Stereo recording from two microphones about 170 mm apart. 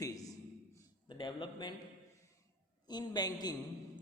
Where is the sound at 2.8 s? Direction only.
25° left (ahead or behind).